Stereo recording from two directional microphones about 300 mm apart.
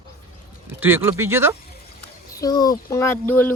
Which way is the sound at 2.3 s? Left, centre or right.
Centre.